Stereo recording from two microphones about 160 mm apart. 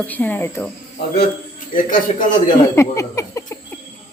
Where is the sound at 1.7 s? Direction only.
55° left (ahead or behind).